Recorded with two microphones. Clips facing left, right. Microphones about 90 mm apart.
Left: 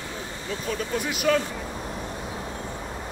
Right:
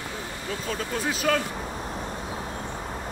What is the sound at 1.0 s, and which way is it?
Speech, 30° right (ahead or behind).